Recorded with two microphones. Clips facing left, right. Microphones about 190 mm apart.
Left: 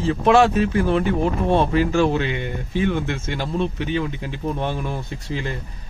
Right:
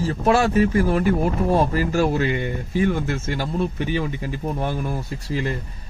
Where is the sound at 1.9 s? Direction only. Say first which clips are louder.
Left 1 dB; 45° right (ahead or behind).